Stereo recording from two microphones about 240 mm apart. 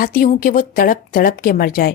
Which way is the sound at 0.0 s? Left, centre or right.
Left.